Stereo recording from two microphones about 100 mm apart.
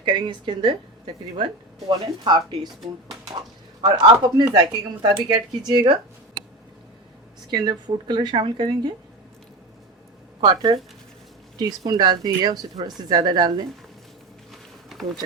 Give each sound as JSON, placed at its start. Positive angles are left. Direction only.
{"t": 0.0, "sound": "a woman's voice", "side_deg": -50}
{"t": 3.8, "sound": "a woman's voice", "side_deg": -50}
{"t": 7.5, "sound": "a woman's voice", "side_deg": -45}
{"t": 10.4, "sound": "a woman's voice", "side_deg": -45}
{"t": 11.9, "sound": "a woman's voice", "side_deg": -45}
{"t": 14.5, "sound": "a sound", "side_deg": 0}